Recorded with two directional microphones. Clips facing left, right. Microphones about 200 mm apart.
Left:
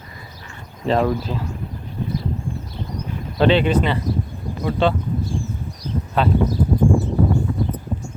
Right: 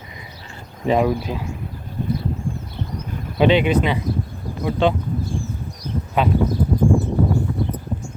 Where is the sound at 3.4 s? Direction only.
10° right (ahead or behind).